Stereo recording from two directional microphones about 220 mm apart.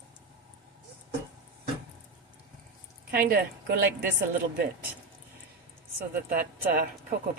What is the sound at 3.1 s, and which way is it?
A woman's voice, 45° right (ahead or behind).